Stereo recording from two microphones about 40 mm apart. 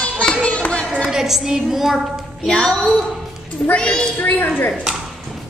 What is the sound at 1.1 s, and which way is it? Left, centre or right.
A woman's voice, centre.